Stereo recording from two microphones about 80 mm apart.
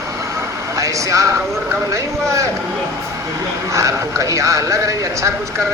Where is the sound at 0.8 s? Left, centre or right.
Right.